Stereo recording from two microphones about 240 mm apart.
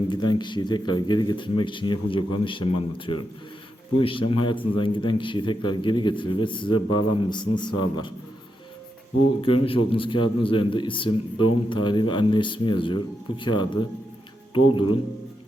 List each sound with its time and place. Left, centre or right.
0.1 s a man's voice: centre
9.6 s a man's voice: left